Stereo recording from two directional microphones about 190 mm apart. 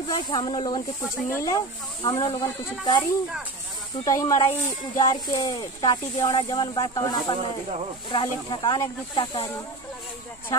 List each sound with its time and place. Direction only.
0.3 s speech: 25° left (ahead or behind)
4.0 s speech: 15° left (ahead or behind)